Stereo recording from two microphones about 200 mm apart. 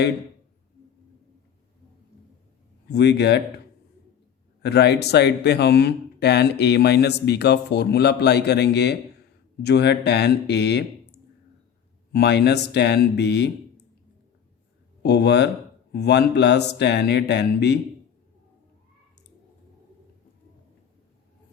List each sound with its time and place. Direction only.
2.9 s speech: 60° left (ahead or behind)
4.6 s speech: 55° left (ahead or behind)
12.1 s speech: 55° left (ahead or behind)
15.0 s speech: 55° left (ahead or behind)